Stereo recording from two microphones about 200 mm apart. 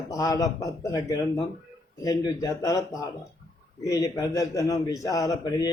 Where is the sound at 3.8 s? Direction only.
20° left (ahead or behind).